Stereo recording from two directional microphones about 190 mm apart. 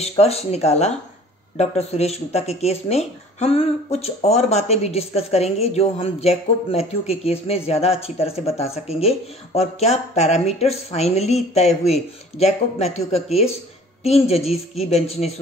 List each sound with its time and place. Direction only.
0.0 s speech: 35° left (ahead or behind)